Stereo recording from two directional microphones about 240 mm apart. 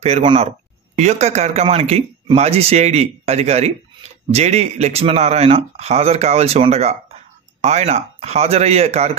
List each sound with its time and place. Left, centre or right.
0.0 s speech: right